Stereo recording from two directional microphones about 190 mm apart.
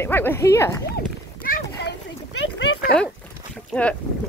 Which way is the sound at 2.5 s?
70° left (ahead or behind).